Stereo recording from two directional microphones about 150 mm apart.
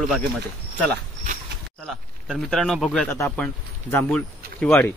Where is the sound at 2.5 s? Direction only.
Centre (ahead or behind).